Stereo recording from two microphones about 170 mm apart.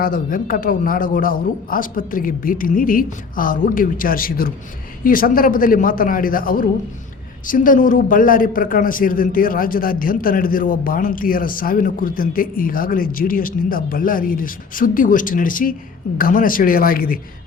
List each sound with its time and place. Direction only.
0.0 s a man's voice: 55° left (ahead or behind)